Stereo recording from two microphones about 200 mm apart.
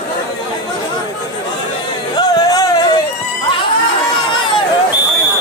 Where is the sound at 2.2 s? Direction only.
20° left (ahead or behind).